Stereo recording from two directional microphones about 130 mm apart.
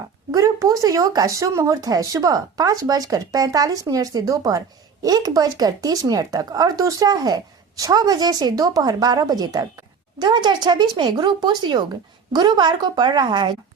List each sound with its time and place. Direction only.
0.3 s speech: 25° right (ahead or behind)